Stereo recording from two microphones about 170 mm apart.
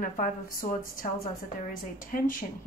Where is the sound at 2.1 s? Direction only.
50° left (ahead or behind).